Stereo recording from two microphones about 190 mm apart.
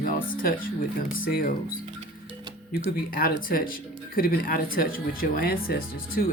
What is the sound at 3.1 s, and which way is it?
Speech, 50° left (ahead or behind).